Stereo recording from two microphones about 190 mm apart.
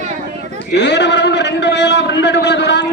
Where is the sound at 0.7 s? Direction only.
65° left (ahead or behind).